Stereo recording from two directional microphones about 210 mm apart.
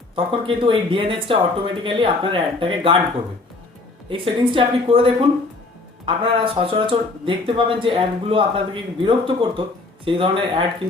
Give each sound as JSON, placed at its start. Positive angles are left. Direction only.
{"t": 0.3, "sound": "speech", "side_deg": -25}
{"t": 4.1, "sound": "speech", "side_deg": -25}